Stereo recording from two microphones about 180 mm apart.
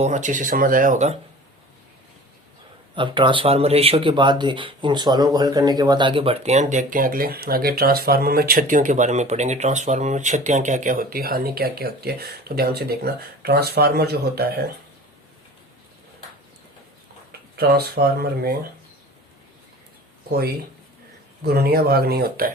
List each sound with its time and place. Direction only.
0.0 s speech: 45° right (ahead or behind)
2.9 s speech: 25° right (ahead or behind); by 14.6 s 60° right (ahead or behind)
17.6 s speech: 60° right (ahead or behind)
21.4 s speech: 60° right (ahead or behind)